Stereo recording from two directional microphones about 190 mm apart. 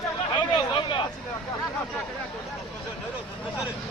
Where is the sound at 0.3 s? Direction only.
25° left (ahead or behind).